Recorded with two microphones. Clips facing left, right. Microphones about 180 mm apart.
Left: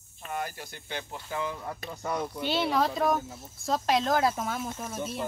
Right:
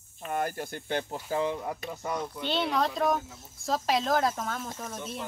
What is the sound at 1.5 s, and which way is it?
Speech, 15° right (ahead or behind).